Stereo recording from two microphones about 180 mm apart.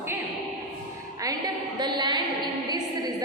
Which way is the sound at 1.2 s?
20° right (ahead or behind).